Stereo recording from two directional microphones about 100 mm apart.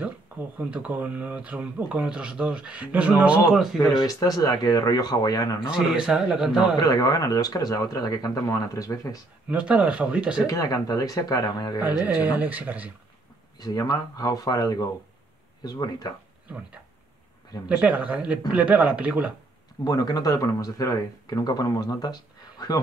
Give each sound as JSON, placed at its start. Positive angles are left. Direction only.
{"t": 0.6, "sound": "speech", "side_deg": -15}
{"t": 3.5, "sound": "a man's voice", "side_deg": 0}
{"t": 4.0, "sound": "speech", "side_deg": 35}
{"t": 5.7, "sound": "a man's voice", "side_deg": -5}
{"t": 6.8, "sound": "speech", "side_deg": 40}
{"t": 9.5, "sound": "speech", "side_deg": -15}
{"t": 10.4, "sound": "speech", "side_deg": 35}
{"t": 12.0, "sound": "speech", "side_deg": -15}
{"t": 13.6, "sound": "speech", "side_deg": 40}
{"t": 17.6, "sound": "speech", "side_deg": -15}
{"t": 19.8, "sound": "speech", "side_deg": 40}